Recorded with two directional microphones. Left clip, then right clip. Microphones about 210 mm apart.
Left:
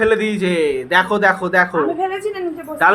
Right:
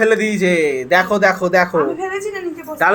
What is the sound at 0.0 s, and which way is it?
A man's voice, 10° right (ahead or behind).